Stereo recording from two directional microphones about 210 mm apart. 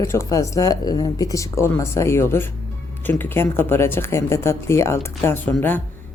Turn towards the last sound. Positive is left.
turn(degrees=10)  # may be behind; listen again after turning